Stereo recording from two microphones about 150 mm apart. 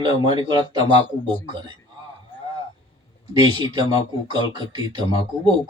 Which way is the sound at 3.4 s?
30° right (ahead or behind).